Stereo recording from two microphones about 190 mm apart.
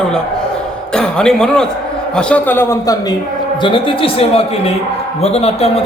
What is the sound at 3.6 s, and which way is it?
A man's voice, 25° left (ahead or behind).